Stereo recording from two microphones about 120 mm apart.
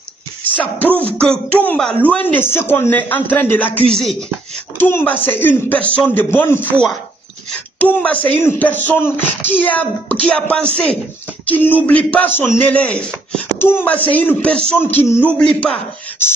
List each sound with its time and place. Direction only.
0.4 s speech: 15° left (ahead or behind)
3.9 s speech: centre (ahead or behind)
4.7 s speech: 15° left (ahead or behind)
7.8 s speech: 10° left (ahead or behind)
13.6 s speech: 20° left (ahead or behind)
16.2 s beatboxing: 20° left (ahead or behind)